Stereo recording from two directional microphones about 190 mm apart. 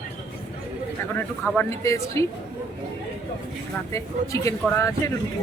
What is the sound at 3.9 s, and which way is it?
Speech, 15° left (ahead or behind).